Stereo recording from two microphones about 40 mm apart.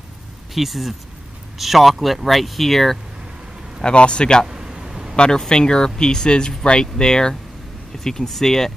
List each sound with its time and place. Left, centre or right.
0.6 s speech: centre
3.8 s speech: left
4.5 s a sound: centre
5.1 s speech: left